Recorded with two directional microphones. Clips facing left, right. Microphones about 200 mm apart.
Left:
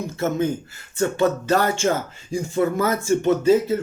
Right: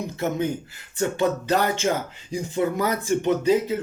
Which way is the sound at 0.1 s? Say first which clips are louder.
Left 4 dB; 15° right (ahead or behind).